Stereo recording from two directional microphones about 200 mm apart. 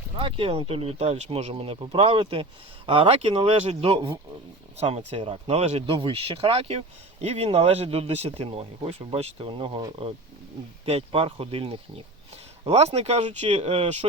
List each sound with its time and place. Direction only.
0.2 s speech: 25° right (ahead or behind)